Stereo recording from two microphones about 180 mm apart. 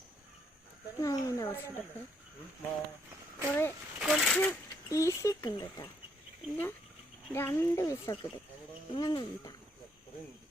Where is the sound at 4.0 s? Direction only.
Centre (ahead or behind); by 5.9 s 20° left (ahead or behind).